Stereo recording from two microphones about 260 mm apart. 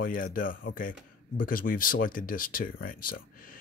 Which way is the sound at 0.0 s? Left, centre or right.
Left.